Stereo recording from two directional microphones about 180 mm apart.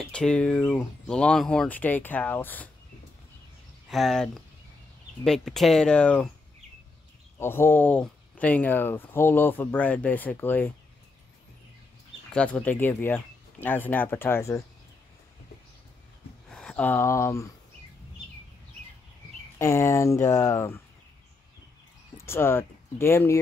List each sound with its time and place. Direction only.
0.0 s speech: 5° left (ahead or behind)
3.9 s speech: centre (ahead or behind)
7.3 s speech: 15° left (ahead or behind)
12.4 s speech: 5° left (ahead or behind)
16.4 s speech: 5° left (ahead or behind)
19.6 s speech: 15° left (ahead or behind)
22.2 s speech: 15° left (ahead or behind)